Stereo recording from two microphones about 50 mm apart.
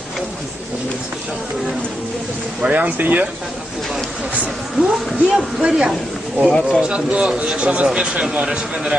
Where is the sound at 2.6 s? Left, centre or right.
Right.